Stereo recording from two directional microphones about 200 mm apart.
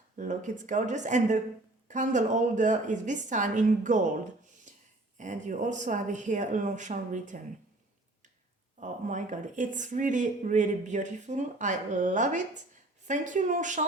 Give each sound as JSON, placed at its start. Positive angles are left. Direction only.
{"t": 0.2, "sound": "speech", "side_deg": -40}
{"t": 8.8, "sound": "speech", "side_deg": -40}